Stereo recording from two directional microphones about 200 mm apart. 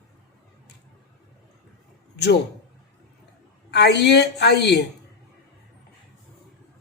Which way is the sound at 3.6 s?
55° left (ahead or behind).